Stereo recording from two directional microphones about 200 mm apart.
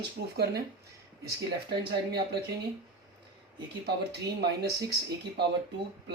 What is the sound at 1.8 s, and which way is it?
Speech, 55° right (ahead or behind).